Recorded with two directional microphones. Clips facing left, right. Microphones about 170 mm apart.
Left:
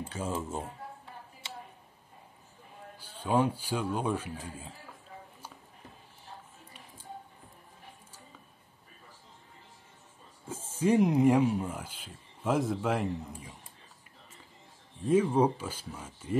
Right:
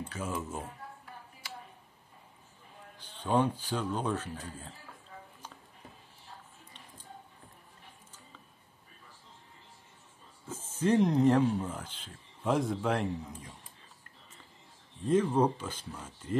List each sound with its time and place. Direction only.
0.1 s a sound: 30° left (ahead or behind)
3.0 s a man's voice: 10° left (ahead or behind)
10.5 s speech: 10° left (ahead or behind)
15.0 s a man's voice: 10° left (ahead or behind)